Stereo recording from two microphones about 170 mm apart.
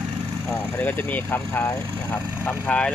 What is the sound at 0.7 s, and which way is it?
Speech, 10° left (ahead or behind).